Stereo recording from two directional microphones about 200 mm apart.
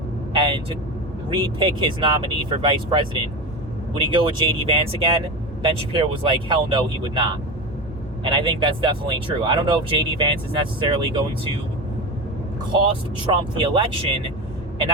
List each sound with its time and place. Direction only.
0.3 s vehicle: 25° right (ahead or behind)
1.3 s speech: 20° right (ahead or behind)
13.3 s speech: 25° right (ahead or behind)